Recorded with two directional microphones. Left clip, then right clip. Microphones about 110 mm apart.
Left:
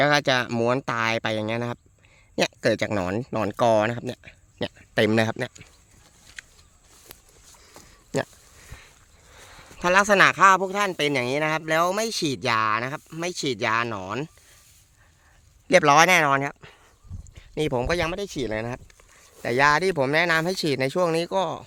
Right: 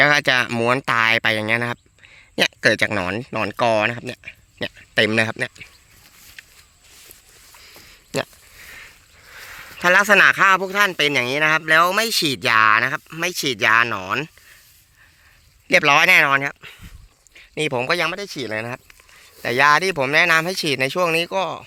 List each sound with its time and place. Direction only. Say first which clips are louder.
0.0 s speech: right 5 dB; centre (ahead or behind); by 5.6 s 25° left (ahead or behind)
7.8 s a sound: right 3 dB; 20° left (ahead or behind)
10.6 s speech: right 6 dB; 10° left (ahead or behind)
15.6 s speech: right 2 dB; 40° left (ahead or behind)
16.6 s a sound: right 8 dB; 35° left (ahead or behind)
17.3 s speech: right 3 dB; 30° left (ahead or behind)
18.1 s speech: right 2 dB; 35° left (ahead or behind)
21.3 s speech: right 2 dB; 45° left (ahead or behind)